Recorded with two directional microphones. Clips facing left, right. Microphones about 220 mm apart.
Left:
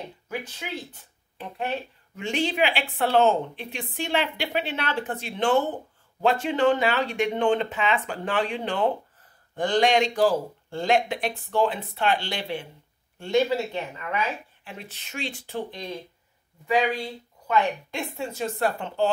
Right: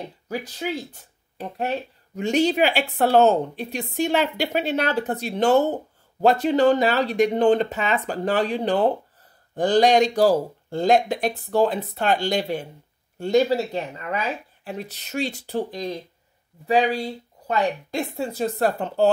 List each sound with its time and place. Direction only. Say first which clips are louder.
0.3 s speech: right 6 dB; 40° right (ahead or behind)